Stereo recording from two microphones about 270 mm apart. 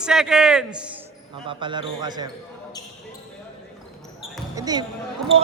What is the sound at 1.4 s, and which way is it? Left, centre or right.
Speech, centre.